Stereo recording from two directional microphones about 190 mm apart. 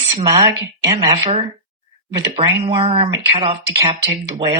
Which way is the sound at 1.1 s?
30° right (ahead or behind).